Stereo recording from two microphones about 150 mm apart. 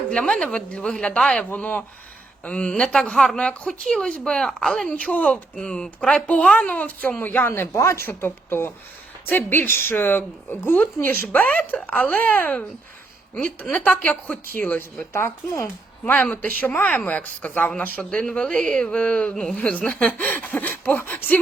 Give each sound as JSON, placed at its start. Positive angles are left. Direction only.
{"t": 0.1, "sound": "speech", "side_deg": 5}